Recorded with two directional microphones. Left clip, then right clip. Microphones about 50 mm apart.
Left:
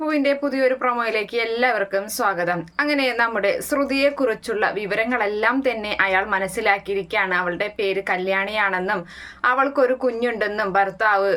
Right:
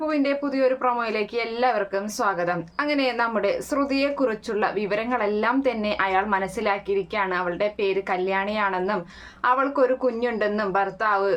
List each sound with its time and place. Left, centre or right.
0.0 s a woman's voice: right